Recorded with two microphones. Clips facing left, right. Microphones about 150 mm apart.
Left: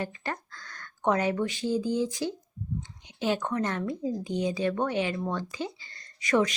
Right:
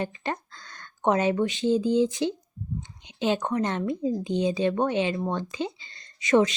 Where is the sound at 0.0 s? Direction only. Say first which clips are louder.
Right 3 dB; 20° right (ahead or behind).